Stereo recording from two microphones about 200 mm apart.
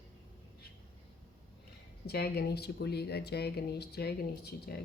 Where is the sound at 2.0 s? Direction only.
55° left (ahead or behind).